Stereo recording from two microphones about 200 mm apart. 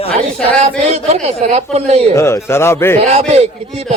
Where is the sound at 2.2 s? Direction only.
15° left (ahead or behind).